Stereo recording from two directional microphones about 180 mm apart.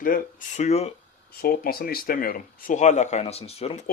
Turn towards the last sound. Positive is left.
turn(degrees=35)  # may be behind; listen again after turning